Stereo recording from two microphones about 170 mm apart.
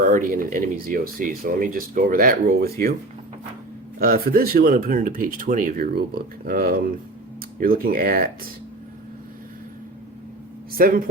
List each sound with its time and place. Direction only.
0.1 s speech: 55° right (ahead or behind)
4.0 s speech: 60° right (ahead or behind)
10.7 s speech: 60° right (ahead or behind)